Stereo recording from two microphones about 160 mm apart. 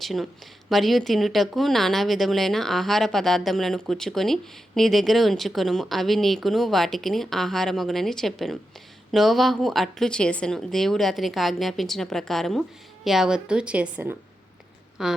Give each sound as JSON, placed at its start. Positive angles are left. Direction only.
{"t": 0.0, "sound": "a woman's voice", "side_deg": 0}